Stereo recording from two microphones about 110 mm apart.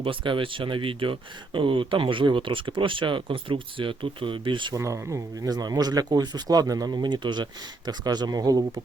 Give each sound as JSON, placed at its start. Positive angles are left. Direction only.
{"t": 0.0, "sound": "speech", "side_deg": -50}
{"t": 4.7, "sound": "speech", "side_deg": -25}